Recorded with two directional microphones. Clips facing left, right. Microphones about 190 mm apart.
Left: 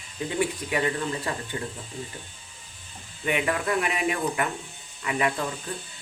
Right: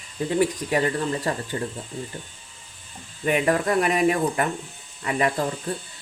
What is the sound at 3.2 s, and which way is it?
Speech, 40° right (ahead or behind).